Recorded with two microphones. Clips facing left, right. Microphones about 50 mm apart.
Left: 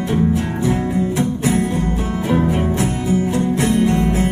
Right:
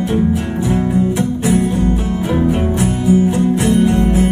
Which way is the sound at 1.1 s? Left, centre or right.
Centre.